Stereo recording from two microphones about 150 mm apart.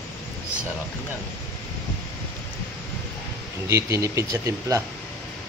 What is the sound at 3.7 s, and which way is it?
Speech, 20° right (ahead or behind).